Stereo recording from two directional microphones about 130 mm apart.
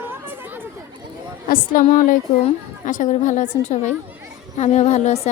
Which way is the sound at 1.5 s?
90° left.